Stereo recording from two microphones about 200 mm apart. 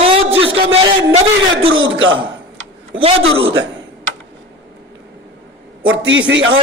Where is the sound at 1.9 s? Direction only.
70° right (ahead or behind).